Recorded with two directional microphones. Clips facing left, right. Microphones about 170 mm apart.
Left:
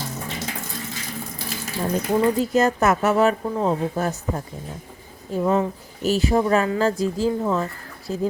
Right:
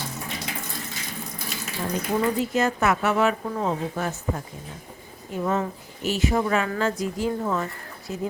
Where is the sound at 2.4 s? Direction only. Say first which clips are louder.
Left 4 dB; 40° left (ahead or behind).